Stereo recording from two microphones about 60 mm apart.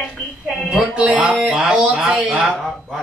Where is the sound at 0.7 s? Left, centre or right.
Centre.